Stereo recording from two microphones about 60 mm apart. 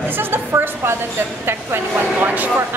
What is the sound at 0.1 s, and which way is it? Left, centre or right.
Speech, right.